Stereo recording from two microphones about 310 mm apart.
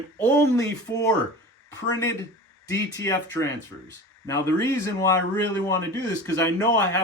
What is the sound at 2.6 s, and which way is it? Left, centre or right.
Speech, centre.